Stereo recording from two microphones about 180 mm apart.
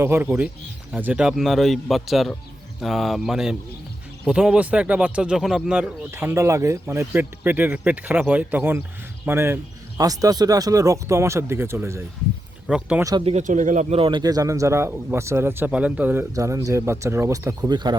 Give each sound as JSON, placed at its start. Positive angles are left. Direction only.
{"t": 0.0, "sound": "speech", "side_deg": -10}
{"t": 13.1, "sound": "speech", "side_deg": -25}
{"t": 13.3, "sound": "speech", "side_deg": -45}
{"t": 13.9, "sound": "speech", "side_deg": -30}